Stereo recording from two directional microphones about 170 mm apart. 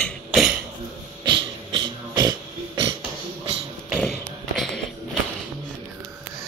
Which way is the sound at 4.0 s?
Centre (ahead or behind).